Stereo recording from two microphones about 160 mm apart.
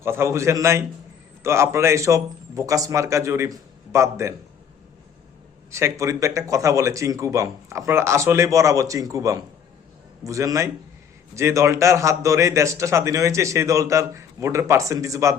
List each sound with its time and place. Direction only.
0.0 s a man's voice: 15° right (ahead or behind)
5.7 s a man's voice: 20° right (ahead or behind)